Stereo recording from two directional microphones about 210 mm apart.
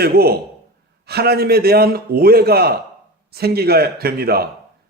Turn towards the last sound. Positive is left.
turn(degrees=-45)  # may be behind; listen again after turning